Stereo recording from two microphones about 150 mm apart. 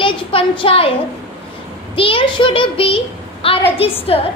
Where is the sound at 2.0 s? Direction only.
35° left (ahead or behind).